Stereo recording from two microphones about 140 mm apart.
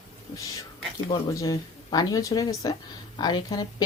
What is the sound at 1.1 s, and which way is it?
Speech, 25° left (ahead or behind).